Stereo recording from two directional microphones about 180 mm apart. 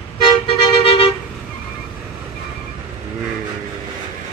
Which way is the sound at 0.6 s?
30° left (ahead or behind).